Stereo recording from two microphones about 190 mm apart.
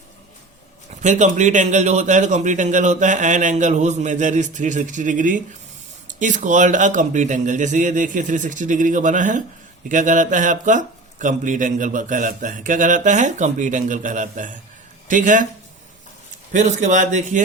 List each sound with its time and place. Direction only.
1.0 s speech: 40° right (ahead or behind)
16.5 s speech: 40° right (ahead or behind)